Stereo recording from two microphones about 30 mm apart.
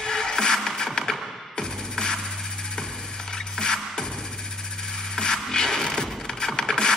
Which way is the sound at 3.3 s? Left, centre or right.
Left.